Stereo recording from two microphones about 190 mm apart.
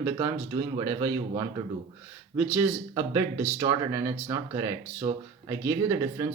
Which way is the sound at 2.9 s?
20° right (ahead or behind).